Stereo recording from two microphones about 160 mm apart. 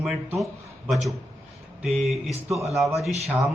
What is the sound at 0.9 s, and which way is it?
A man's voice, centre (ahead or behind).